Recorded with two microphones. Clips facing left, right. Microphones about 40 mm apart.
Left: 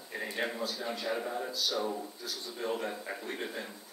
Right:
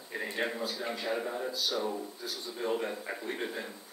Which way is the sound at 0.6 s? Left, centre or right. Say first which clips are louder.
Right 1 dB; centre.